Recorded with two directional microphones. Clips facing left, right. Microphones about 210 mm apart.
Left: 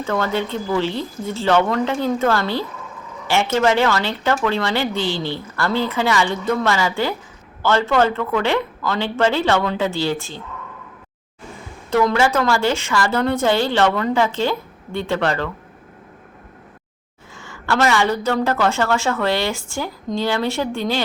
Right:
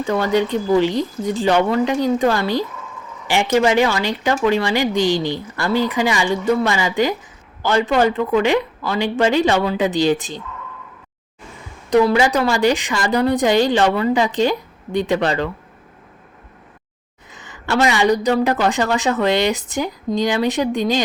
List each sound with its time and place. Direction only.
0.0 s speech: 15° right (ahead or behind)
11.9 s speech: 15° right (ahead or behind)
17.3 s speech: 20° right (ahead or behind)